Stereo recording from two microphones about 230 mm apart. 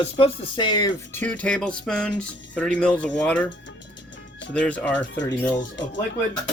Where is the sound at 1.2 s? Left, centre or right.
Centre.